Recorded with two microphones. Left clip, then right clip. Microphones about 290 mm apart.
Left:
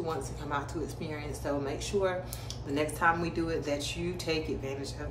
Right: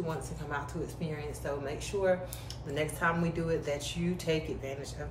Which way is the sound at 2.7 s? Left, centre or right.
Centre.